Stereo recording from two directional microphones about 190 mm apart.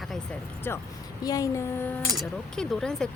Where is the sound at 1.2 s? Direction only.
20° left (ahead or behind).